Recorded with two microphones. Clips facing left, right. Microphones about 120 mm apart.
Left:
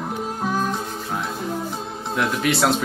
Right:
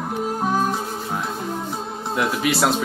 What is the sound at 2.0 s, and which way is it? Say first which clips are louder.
Speech: even; 5° right (ahead or behind).